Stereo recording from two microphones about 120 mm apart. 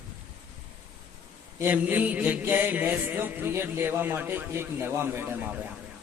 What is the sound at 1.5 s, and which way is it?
Mantra, 15° right (ahead or behind).